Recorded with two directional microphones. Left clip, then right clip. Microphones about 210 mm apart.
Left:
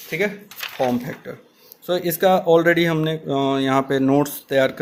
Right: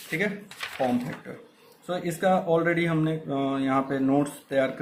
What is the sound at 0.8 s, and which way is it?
Speech, 45° left (ahead or behind).